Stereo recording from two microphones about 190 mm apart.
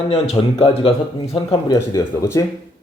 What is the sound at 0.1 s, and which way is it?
Speech, 30° left (ahead or behind).